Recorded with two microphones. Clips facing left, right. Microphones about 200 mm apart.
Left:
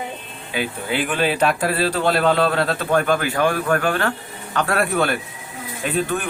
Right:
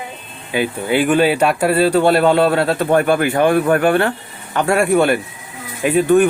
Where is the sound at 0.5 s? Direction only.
55° right (ahead or behind).